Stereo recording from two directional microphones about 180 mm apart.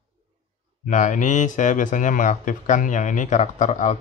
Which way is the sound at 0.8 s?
45° left (ahead or behind).